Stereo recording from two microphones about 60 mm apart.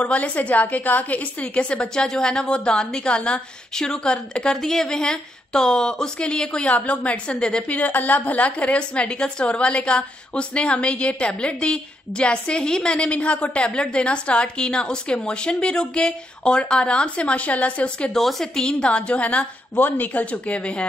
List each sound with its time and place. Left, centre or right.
0.0 s a woman's voice: left
7.7 s a woman's voice: left
18.1 s a woman's voice: centre
19.7 s speech: left